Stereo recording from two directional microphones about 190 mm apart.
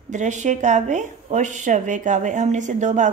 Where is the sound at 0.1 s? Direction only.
40° right (ahead or behind).